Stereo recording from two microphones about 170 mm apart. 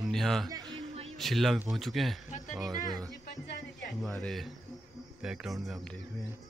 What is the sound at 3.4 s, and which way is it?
Speech, 85° left.